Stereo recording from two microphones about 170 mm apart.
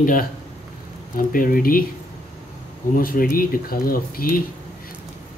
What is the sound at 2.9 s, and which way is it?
Speech, 55° left (ahead or behind).